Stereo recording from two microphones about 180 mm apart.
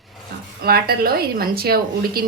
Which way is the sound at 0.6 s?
60° right (ahead or behind).